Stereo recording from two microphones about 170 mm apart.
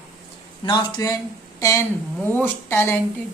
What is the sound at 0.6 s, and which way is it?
A woman's voice, 25° left (ahead or behind).